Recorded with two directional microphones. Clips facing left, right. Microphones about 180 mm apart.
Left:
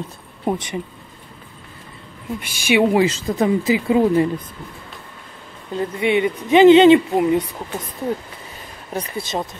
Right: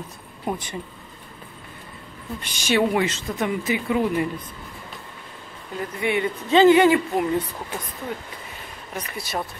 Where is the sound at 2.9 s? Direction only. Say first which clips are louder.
Left 6 dB; 30° left (ahead or behind).